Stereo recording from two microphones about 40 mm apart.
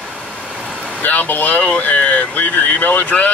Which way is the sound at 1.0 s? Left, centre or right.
Left.